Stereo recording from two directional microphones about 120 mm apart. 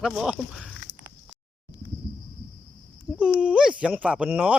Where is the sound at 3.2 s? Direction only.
10° right (ahead or behind).